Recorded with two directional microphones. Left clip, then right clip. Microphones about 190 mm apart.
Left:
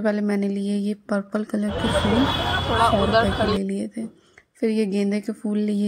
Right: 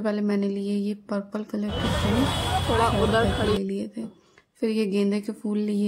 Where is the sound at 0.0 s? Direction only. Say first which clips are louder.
Left 3 dB; 15° left (ahead or behind).